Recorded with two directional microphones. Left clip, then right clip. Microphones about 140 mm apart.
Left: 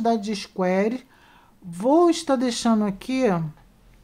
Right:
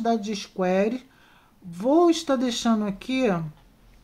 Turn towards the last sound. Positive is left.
turn(degrees=30)  # may be behind; listen again after turning